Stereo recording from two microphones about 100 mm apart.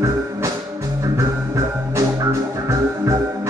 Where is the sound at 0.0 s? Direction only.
30° right (ahead or behind).